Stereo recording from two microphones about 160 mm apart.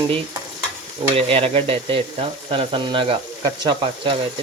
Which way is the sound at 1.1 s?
35° right (ahead or behind).